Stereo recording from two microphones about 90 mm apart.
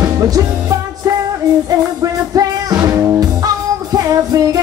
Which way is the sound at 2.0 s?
40° right (ahead or behind).